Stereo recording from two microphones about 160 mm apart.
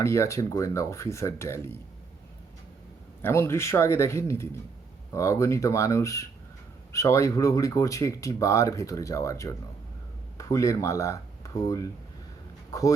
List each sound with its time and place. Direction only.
0.0 s speech: 20° left (ahead or behind)
3.2 s speech: 15° left (ahead or behind)